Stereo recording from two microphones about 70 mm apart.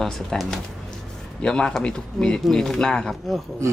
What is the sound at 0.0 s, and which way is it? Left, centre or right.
Speech, centre.